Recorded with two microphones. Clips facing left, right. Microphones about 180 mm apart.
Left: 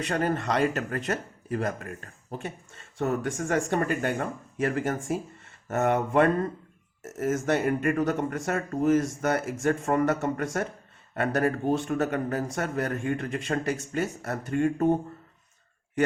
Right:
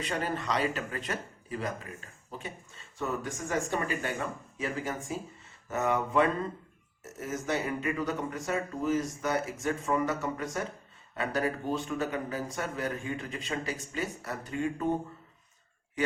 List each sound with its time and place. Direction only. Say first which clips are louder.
0.1 s a man's voice: left 5 dB; 55° left (ahead or behind)